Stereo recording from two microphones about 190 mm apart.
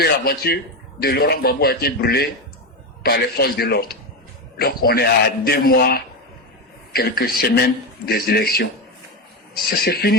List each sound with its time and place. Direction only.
0.0 s a man's voice: 55° left (ahead or behind)
9.8 s a man's voice: 55° left (ahead or behind)